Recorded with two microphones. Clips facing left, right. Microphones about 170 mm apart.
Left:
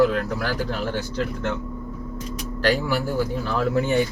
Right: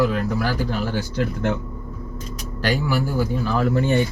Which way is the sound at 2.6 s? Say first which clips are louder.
Even; centre (ahead or behind).